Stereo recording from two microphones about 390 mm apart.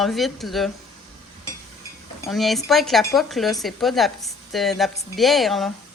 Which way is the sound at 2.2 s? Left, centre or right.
Centre.